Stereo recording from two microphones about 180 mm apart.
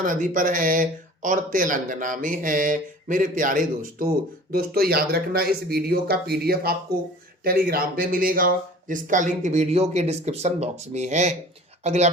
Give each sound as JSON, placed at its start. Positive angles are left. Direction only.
{"t": 0.0, "sound": "speech", "side_deg": -50}